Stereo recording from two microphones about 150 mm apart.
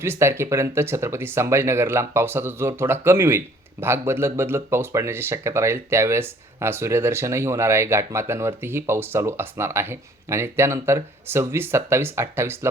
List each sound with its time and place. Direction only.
0.0 s speech: 15° right (ahead or behind)